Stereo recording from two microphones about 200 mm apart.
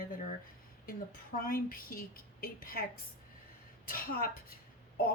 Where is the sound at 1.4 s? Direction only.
45° left (ahead or behind).